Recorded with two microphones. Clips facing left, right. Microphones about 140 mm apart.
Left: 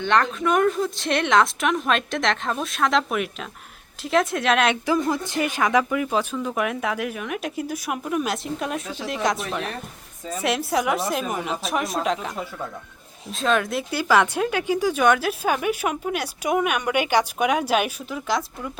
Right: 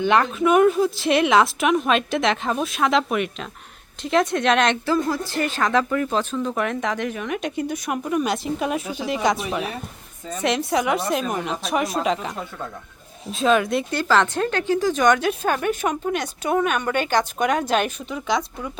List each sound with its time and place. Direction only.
0.0 s speech: 10° right (ahead or behind)
5.0 s speech: 20° left (ahead or behind); by 18.7 s centre (ahead or behind)